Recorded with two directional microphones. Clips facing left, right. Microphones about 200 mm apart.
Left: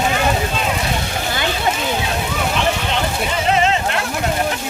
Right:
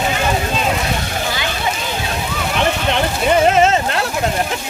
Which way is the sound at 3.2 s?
45° right (ahead or behind).